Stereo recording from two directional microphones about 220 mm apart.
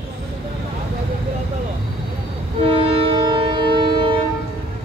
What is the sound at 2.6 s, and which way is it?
Train, 25° right (ahead or behind).